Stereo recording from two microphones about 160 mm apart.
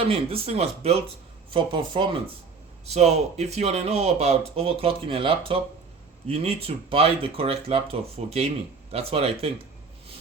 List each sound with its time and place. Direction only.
0.0 s speech: 35° right (ahead or behind)
2.8 s speech: 40° right (ahead or behind)